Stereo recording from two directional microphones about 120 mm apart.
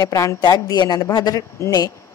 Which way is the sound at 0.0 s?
30° left (ahead or behind).